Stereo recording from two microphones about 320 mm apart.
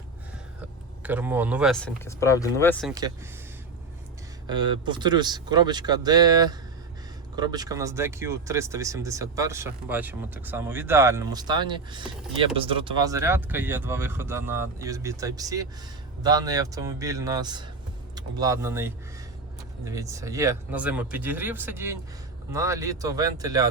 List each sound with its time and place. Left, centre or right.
1.0 s speech: centre
4.4 s speech: centre